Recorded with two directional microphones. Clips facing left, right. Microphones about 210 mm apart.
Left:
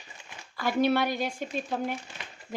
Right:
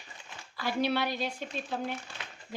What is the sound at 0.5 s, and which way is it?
Speech, 50° left (ahead or behind).